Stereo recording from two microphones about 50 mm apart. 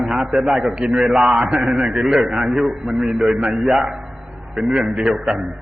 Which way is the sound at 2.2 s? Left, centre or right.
Centre.